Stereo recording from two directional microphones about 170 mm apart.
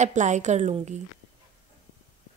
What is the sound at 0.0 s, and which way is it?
A woman's voice, 45° right (ahead or behind).